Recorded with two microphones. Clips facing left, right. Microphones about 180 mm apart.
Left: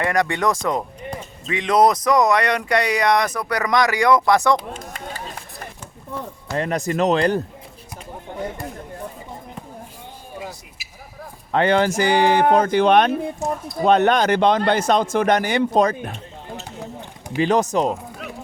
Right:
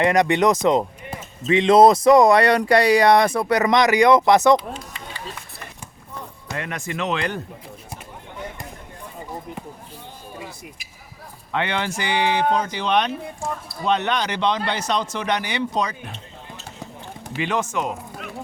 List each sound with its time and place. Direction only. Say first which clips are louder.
0.0 s speech: right 3 dB; 20° right (ahead or behind)
4.7 s run: left 2 dB; 45° left (ahead or behind)
6.6 s speech: left 8 dB; 35° left (ahead or behind)
11.5 s a man's voice: left 8 dB; 40° left (ahead or behind)
17.3 s speech: left 6 dB; 40° left (ahead or behind)